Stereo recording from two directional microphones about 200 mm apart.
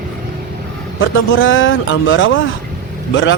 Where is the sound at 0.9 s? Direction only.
75° left (ahead or behind).